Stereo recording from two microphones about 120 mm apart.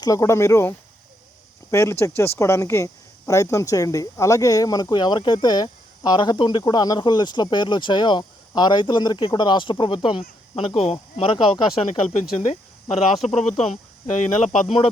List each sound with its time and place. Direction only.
0.0 s speech: 30° left (ahead or behind); by 11.9 s 45° left (ahead or behind)
12.4 s speech: 60° left (ahead or behind)